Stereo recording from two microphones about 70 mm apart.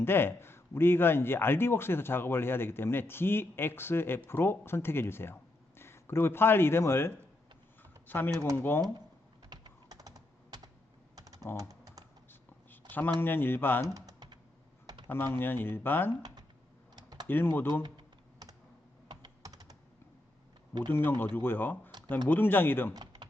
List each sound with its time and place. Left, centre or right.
0.0 s a man's voice: left
7.8 s a sound: left
8.5 s a man's voice: left
9.5 s typing: right
13.1 s a man's voice: left
13.8 s typing: right
15.0 s a man's voice: left
16.9 s typing: right
17.2 s a man's voice: left
17.8 s typing: right
19.0 s computer keyboard: right
20.9 s a man's voice: left
23.0 s computer keyboard: right